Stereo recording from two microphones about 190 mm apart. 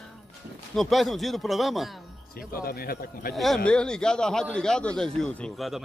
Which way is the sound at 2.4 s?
50° left (ahead or behind).